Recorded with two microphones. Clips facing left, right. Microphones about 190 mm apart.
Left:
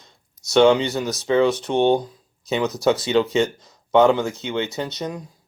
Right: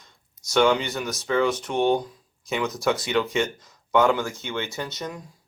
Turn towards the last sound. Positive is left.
turn(degrees=20)  # may be behind; listen again after turning